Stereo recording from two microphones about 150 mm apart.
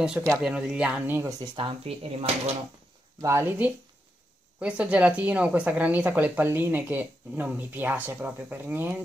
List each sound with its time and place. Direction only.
0.4 s speech: 5° right (ahead or behind)
1.4 s speech: 30° right (ahead or behind)
3.2 s speech: 15° right (ahead or behind)